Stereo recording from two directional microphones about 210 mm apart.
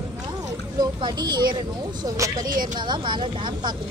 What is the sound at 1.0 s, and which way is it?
Speech, 20° right (ahead or behind).